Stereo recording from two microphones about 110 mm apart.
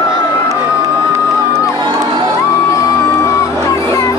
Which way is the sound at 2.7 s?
30° left (ahead or behind).